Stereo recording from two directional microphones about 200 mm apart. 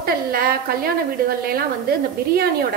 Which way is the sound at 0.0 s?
50° right (ahead or behind).